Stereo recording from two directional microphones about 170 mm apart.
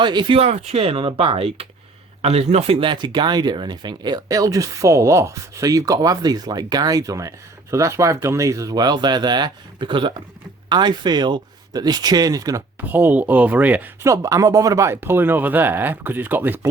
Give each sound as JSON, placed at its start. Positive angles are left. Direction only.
{"t": 0.0, "sound": "speech", "side_deg": -25}
{"t": 12.9, "sound": "speech", "side_deg": -10}